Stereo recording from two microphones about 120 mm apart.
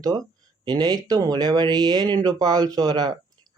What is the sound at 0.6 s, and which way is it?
Speech, 35° right (ahead or behind).